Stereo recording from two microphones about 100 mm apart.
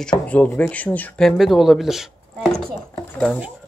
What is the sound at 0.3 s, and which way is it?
Speech, 15° left (ahead or behind).